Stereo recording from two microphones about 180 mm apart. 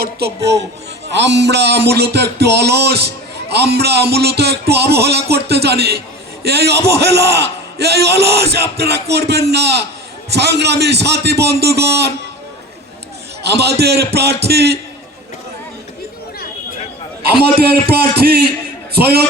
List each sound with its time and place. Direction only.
1.0 s music: 75° right (ahead or behind)
3.5 s a man's voice: 65° right (ahead or behind)
10.2 s music: 65° right (ahead or behind)
13.4 s a man's voice: 65° right (ahead or behind)
17.4 s a man's voice: 60° right (ahead or behind)